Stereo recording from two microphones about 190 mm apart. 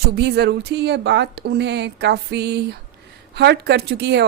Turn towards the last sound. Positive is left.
turn(degrees=-60)  # may be behind; listen again after turning